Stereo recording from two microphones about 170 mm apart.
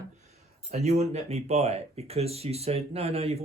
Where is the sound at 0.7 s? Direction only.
40° right (ahead or behind).